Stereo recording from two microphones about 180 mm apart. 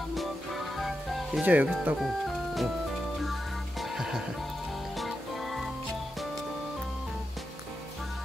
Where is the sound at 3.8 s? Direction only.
Centre (ahead or behind).